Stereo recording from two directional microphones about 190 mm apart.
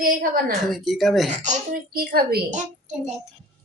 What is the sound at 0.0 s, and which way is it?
Speech, 50° right (ahead or behind).